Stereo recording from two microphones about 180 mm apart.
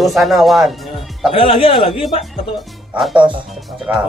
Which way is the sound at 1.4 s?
30° left (ahead or behind).